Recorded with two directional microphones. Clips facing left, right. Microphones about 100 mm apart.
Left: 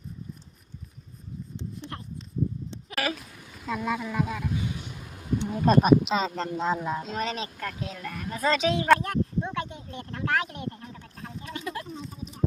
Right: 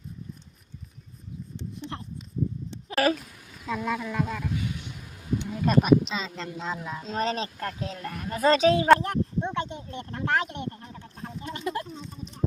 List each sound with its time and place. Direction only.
1.8 s a sound: 25° right (ahead or behind)
2.9 s speech: 35° right (ahead or behind)
3.7 s speech: 5° left (ahead or behind)
5.4 s speech: 35° left (ahead or behind)
7.1 s speech: 35° right (ahead or behind)
8.9 s a sound: 30° right (ahead or behind)
11.4 s speech: 30° right (ahead or behind)
11.9 s speech: centre (ahead or behind)